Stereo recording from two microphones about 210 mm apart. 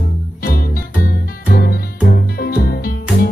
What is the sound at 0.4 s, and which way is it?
Music, 45° left (ahead or behind).